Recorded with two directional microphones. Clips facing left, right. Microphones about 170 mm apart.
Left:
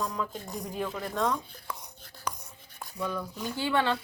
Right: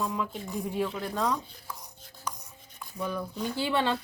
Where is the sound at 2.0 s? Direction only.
70° left (ahead or behind).